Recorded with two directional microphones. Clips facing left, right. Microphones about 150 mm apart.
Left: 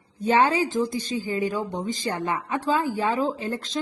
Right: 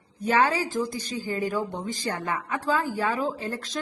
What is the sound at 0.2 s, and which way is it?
A woman's voice, 25° left (ahead or behind).